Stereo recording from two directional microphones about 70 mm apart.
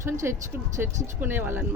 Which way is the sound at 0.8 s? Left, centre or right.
Right.